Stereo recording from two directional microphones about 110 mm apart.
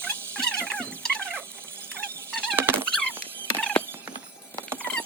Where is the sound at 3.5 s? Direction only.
15° left (ahead or behind).